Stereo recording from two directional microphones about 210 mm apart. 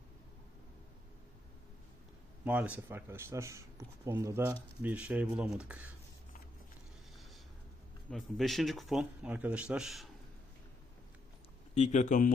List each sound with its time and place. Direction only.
2.4 s speech: 5° right (ahead or behind)
8.1 s speech: centre (ahead or behind)
11.7 s speech: 35° left (ahead or behind)